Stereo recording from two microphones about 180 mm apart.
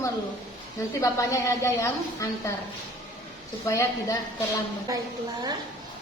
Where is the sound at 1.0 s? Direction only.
20° left (ahead or behind).